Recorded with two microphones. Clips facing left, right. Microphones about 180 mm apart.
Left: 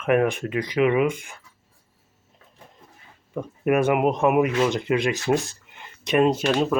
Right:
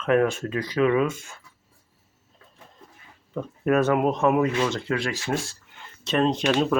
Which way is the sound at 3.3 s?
15° left (ahead or behind).